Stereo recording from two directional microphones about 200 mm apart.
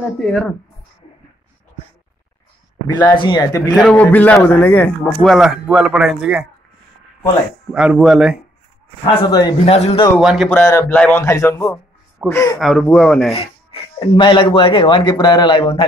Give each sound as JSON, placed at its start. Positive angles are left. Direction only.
{"t": 0.2, "sound": "a man's voice", "side_deg": 5}
{"t": 2.9, "sound": "speech", "side_deg": 20}
{"t": 3.7, "sound": "a man's voice", "side_deg": 5}
{"t": 7.7, "sound": "a man's voice", "side_deg": -5}
{"t": 9.0, "sound": "speech", "side_deg": 20}
{"t": 9.8, "sound": "a man's voice", "side_deg": 35}
{"t": 10.1, "sound": "a man's voice", "side_deg": 0}
{"t": 10.5, "sound": "a man's voice", "side_deg": 15}
{"t": 12.5, "sound": "a man's voice", "side_deg": 0}
{"t": 13.9, "sound": "speech", "side_deg": 25}